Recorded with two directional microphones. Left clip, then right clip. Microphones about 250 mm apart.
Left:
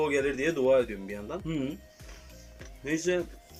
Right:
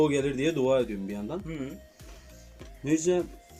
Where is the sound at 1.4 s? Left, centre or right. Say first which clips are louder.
Left 4 dB; centre.